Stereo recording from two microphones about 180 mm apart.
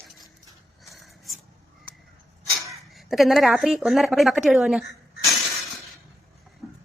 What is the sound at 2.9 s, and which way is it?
A woman's voice, centre (ahead or behind).